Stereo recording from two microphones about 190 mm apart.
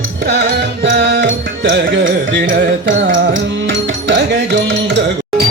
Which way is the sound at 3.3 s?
70° right (ahead or behind).